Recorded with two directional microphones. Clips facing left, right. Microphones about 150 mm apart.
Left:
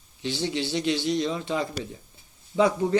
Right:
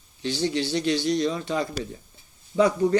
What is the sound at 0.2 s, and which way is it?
Speech, 20° left (ahead or behind).